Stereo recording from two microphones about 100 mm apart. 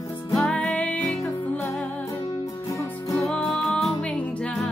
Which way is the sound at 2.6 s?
30° left (ahead or behind).